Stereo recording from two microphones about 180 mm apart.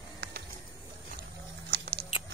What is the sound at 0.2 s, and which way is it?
Bird, 70° right (ahead or behind).